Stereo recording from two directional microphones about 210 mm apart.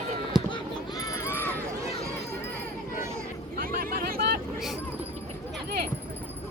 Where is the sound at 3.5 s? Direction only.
45° right (ahead or behind).